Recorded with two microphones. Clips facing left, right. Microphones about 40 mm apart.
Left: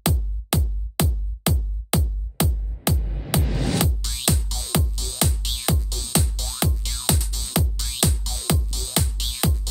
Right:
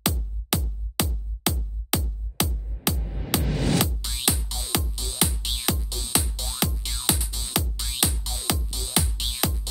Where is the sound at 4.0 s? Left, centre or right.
Centre.